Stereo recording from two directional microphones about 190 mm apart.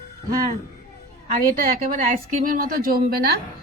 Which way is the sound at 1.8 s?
45° right (ahead or behind).